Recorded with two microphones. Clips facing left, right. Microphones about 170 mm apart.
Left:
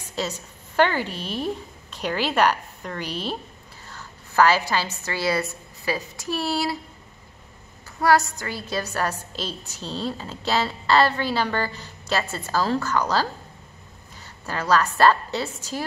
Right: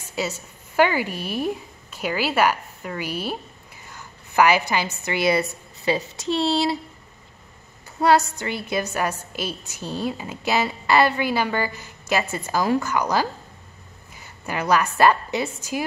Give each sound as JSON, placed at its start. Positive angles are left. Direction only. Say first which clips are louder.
{"t": 0.2, "sound": "a woman's voice", "louder": "right 1 dB", "side_deg": -10}
{"t": 8.0, "sound": "a woman's voice", "louder": "right 2 dB", "side_deg": -20}